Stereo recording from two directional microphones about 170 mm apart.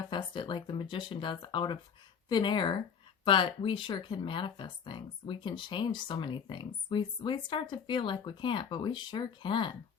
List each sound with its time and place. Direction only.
0.1 s speech: 25° left (ahead or behind)